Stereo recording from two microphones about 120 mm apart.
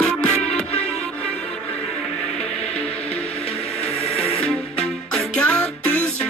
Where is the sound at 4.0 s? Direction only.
55° left (ahead or behind).